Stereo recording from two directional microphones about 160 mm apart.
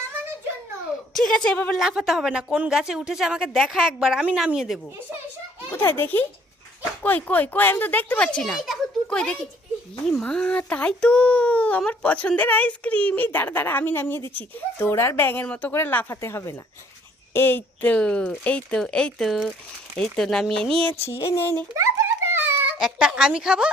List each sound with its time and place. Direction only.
1.1 s a woman's voice: 5° left (ahead or behind)
1.8 s speech: 5° right (ahead or behind)
5.7 s a child's voice: 15° left (ahead or behind)
20.9 s a sound: 40° left (ahead or behind)
21.2 s a child's voice: 15° left (ahead or behind)
21.8 s a sound: 15° right (ahead or behind)